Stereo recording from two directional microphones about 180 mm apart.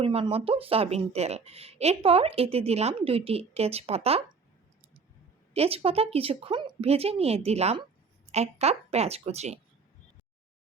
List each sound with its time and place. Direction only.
0.0 s a woman's voice: 30° right (ahead or behind)
5.5 s a woman's voice: 35° right (ahead or behind)